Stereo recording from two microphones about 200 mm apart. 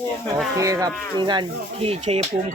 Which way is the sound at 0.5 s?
15° right (ahead or behind).